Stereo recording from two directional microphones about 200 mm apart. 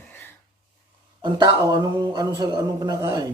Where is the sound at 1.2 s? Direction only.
20° right (ahead or behind).